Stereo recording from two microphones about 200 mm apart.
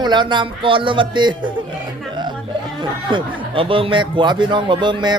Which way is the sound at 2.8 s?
25° right (ahead or behind).